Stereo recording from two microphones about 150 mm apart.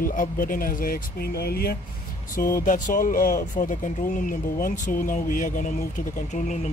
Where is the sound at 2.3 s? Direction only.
65° left (ahead or behind).